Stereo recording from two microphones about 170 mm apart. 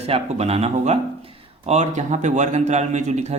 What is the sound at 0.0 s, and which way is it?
Speech, 35° right (ahead or behind).